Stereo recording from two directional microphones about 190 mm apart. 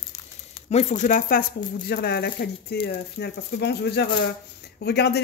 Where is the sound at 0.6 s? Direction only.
35° left (ahead or behind).